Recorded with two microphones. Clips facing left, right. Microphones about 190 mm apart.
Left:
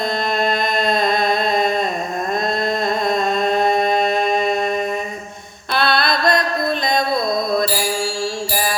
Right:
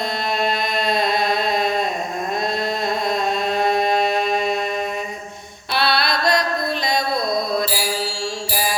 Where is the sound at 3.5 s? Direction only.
50° left (ahead or behind).